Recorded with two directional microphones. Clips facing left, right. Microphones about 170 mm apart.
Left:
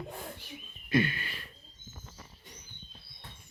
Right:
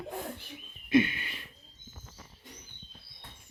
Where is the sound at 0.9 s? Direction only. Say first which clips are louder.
Right 3 dB; 20° right (ahead or behind).